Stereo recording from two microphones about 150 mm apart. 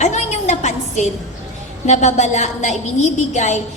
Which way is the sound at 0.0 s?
50° left (ahead or behind).